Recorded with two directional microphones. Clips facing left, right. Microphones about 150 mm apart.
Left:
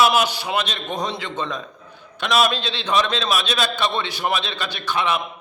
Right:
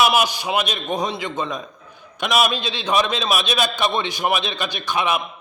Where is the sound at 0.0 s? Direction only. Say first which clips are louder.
Even; 15° right (ahead or behind).